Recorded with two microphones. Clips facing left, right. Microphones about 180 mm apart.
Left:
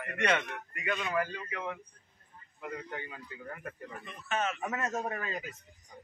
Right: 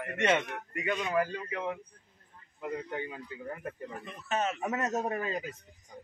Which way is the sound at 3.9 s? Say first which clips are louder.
Right 1 dB; 35° right (ahead or behind).